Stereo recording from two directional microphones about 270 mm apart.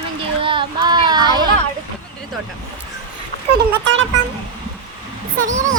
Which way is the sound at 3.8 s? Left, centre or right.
Right.